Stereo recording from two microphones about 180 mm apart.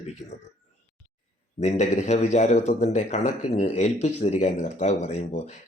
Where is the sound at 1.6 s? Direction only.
40° left (ahead or behind).